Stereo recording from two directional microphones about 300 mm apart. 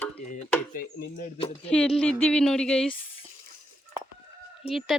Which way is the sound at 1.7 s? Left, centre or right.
Centre.